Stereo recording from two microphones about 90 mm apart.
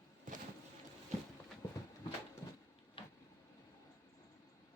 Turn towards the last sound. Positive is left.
turn(degrees=75)  # may be behind; listen again after turning